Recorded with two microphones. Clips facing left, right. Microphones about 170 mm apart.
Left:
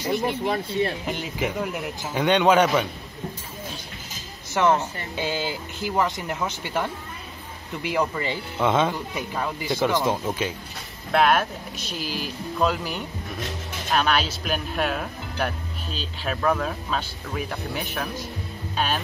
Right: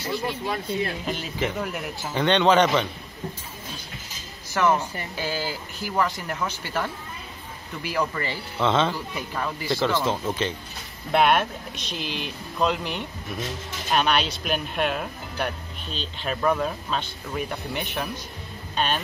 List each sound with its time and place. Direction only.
0.0 s speech: 20° left (ahead or behind)
4.6 s speech: 20° left (ahead or behind)
11.1 s speech: centre (ahead or behind)